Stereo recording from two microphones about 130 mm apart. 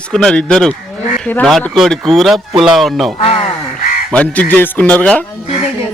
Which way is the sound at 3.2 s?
45° left (ahead or behind).